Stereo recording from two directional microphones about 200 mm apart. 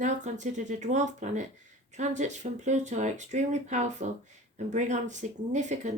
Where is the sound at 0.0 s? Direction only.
35° right (ahead or behind).